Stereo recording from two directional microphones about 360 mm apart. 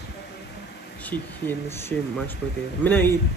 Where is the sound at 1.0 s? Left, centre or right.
Centre.